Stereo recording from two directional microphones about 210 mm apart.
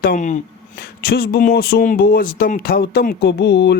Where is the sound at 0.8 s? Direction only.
50° left (ahead or behind).